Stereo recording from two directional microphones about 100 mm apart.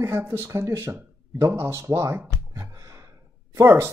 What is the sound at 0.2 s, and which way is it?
Speech, 25° right (ahead or behind).